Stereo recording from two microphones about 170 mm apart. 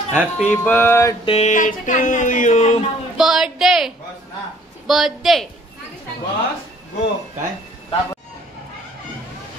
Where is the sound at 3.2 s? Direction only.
5° right (ahead or behind).